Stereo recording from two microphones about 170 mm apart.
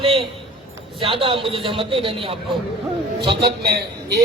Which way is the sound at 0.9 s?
30° right (ahead or behind).